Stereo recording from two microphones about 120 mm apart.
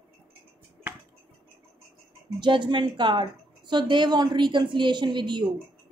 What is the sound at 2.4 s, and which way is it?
Speech, 40° right (ahead or behind).